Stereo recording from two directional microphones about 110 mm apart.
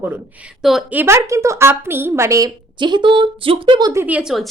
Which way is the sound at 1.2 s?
30° right (ahead or behind).